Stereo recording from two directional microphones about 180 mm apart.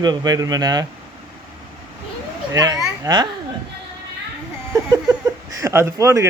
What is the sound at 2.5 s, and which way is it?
Speech, 20° right (ahead or behind).